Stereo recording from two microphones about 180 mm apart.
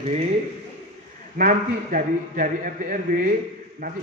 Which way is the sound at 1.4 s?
50° right (ahead or behind).